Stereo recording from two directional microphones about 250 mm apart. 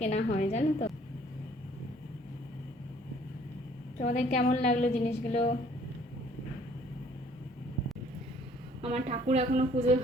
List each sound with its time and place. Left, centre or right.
0.0 s a woman's voice: left
3.9 s a woman's voice: left
8.8 s a woman's voice: right